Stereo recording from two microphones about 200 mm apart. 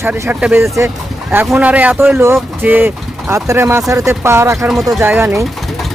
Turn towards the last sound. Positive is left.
turn(degrees=-10)  # may be behind; listen again after turning